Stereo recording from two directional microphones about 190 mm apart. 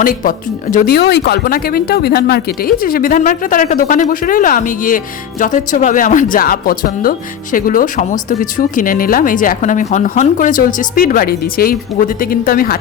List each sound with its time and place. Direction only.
0.0 s speech: 50° left (ahead or behind)